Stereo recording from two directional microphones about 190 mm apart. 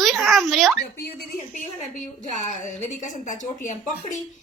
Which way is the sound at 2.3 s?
40° left (ahead or behind).